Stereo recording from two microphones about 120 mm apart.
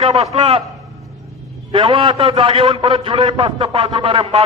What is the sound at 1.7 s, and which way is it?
A man's voice, 45° right (ahead or behind).